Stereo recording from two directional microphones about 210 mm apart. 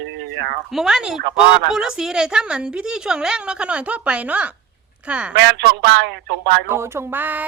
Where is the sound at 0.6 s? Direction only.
Centre (ahead or behind).